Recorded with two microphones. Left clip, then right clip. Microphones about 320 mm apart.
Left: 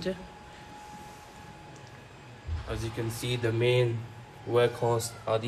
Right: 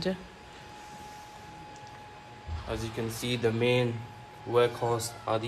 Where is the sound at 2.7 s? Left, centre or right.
Centre.